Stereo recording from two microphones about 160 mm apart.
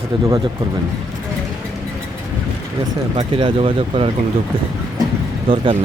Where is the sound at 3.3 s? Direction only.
35° right (ahead or behind).